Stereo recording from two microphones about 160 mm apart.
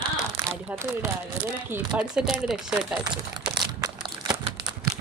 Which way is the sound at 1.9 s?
5° right (ahead or behind).